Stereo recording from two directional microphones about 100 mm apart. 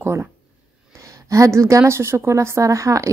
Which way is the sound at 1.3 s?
30° right (ahead or behind).